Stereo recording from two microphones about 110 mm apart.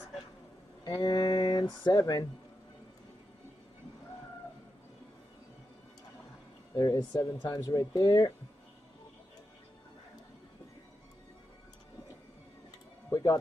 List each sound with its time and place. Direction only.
0.8 s speech: 40° left (ahead or behind)
6.7 s speech: 35° left (ahead or behind)
13.1 s music: 35° left (ahead or behind)